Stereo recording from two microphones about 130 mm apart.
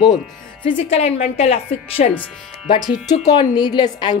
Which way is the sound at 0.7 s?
45° left (ahead or behind).